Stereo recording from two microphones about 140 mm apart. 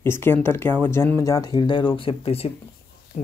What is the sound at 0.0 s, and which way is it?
Speech, 15° left (ahead or behind).